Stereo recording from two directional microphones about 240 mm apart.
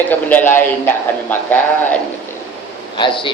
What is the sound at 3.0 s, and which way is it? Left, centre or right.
Speech, left.